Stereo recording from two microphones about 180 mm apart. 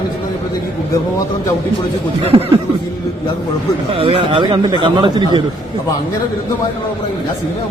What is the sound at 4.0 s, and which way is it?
A man's voice, 30° right (ahead or behind).